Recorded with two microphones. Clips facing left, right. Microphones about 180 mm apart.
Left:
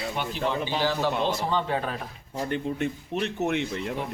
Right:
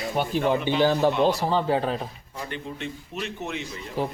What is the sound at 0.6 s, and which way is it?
Speech, 55° right (ahead or behind).